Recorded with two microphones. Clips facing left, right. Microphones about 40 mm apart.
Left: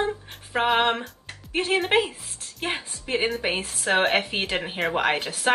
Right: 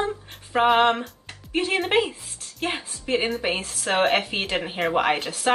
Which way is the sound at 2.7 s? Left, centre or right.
Centre.